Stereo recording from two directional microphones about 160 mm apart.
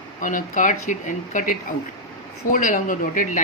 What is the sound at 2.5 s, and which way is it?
Speech, 55° left (ahead or behind).